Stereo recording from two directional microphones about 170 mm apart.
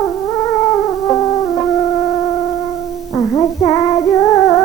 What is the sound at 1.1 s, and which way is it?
Music, 20° left (ahead or behind).